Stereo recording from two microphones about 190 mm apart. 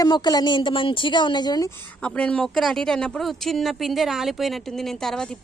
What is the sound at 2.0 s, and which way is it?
A woman's voice, 5° left (ahead or behind).